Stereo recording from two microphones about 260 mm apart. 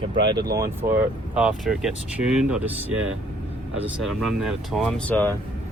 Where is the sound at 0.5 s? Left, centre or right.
Centre.